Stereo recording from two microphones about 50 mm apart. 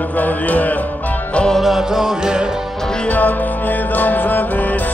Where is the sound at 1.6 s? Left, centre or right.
Centre.